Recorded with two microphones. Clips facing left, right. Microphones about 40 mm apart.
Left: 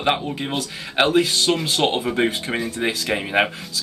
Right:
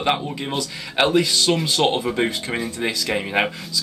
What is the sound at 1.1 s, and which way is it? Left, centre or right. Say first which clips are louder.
Speech: even; left.